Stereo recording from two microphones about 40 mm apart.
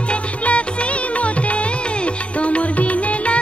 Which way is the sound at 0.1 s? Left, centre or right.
Left.